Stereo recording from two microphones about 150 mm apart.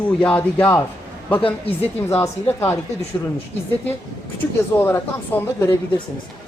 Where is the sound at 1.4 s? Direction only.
40° left (ahead or behind).